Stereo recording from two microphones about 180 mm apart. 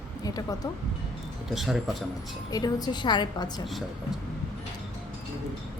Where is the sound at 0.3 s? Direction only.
20° left (ahead or behind).